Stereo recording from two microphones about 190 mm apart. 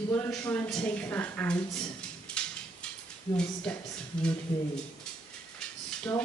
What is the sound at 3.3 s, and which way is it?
Speech, 5° left (ahead or behind).